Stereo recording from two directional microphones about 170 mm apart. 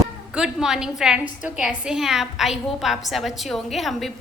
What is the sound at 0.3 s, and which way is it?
A woman's voice, 5° right (ahead or behind).